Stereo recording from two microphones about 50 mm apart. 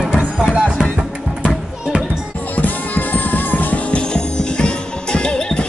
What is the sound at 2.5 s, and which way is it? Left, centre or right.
Music, left.